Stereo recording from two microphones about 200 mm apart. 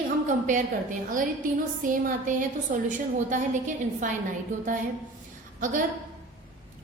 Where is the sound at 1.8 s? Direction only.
40° right (ahead or behind).